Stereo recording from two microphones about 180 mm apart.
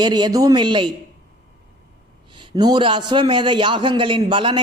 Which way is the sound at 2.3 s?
25° right (ahead or behind).